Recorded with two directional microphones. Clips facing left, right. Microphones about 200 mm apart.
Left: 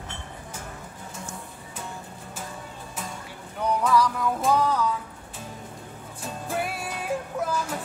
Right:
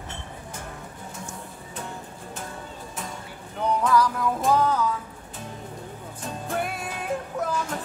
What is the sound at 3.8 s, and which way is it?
Music, centre (ahead or behind).